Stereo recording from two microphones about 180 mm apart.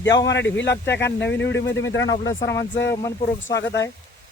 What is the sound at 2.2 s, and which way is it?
Speech, 20° left (ahead or behind).